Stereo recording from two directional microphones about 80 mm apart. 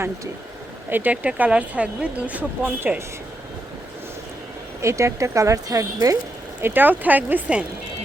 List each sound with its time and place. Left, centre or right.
0.9 s speech: right
4.8 s speech: right
6.6 s speech: right